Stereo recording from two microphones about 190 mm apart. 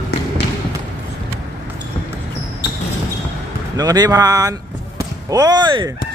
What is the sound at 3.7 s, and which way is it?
Speech, 20° right (ahead or behind).